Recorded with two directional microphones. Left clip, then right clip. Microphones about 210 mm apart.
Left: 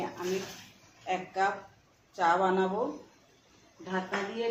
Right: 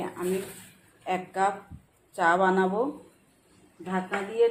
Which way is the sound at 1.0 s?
35° right (ahead or behind).